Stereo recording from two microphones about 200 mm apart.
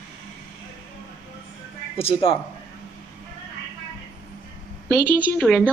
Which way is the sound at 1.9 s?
30° left (ahead or behind).